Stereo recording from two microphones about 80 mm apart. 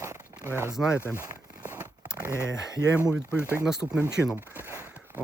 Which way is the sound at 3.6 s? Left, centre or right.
Centre.